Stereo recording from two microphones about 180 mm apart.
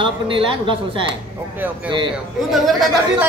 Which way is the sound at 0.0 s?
30° right (ahead or behind).